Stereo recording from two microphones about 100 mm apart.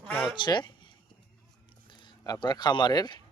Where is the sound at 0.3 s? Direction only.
45° left (ahead or behind).